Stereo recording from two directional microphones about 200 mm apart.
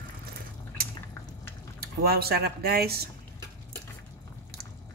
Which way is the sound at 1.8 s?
50° right (ahead or behind).